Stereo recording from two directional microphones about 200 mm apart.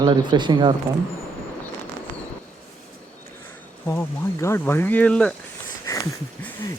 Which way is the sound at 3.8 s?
15° left (ahead or behind).